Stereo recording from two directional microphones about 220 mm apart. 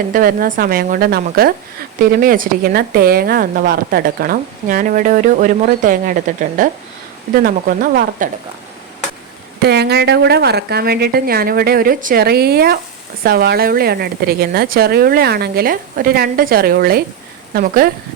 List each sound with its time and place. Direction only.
0.1 s a woman's voice: 40° right (ahead or behind)
9.6 s a woman's voice: 50° right (ahead or behind)